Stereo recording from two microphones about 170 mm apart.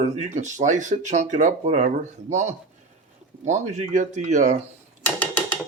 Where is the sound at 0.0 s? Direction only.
45° right (ahead or behind).